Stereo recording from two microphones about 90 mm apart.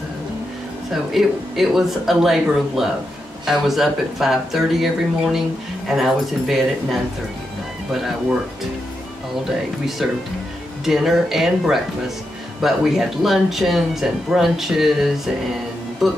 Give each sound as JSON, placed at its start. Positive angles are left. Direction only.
{"t": 1.1, "sound": "speech", "side_deg": -5}
{"t": 10.9, "sound": "speech", "side_deg": -5}